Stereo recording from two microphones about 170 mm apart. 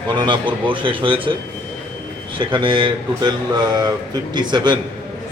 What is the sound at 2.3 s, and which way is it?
Speech, 30° right (ahead or behind).